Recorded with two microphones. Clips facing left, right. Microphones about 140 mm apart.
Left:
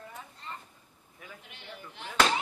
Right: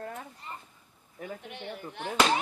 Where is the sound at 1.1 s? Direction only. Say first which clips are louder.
Right 10 dB; 40° right (ahead or behind).